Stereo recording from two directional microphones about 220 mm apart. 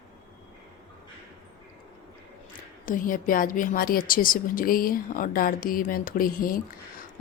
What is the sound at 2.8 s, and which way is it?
Speech, 40° left (ahead or behind).